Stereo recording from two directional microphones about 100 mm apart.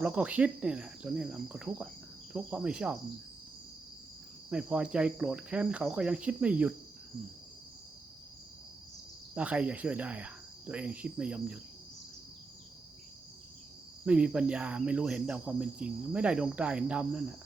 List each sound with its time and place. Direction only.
0.0 s speech: 10° right (ahead or behind)
4.4 s speech: 10° right (ahead or behind)
9.3 s speech: 15° right (ahead or behind)
14.0 s speech: 10° right (ahead or behind)